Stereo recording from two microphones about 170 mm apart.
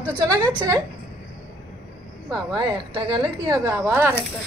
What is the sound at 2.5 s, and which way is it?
Speech, 25° right (ahead or behind).